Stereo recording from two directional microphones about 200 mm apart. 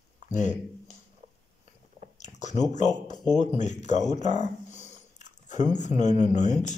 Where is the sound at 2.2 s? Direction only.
35° left (ahead or behind).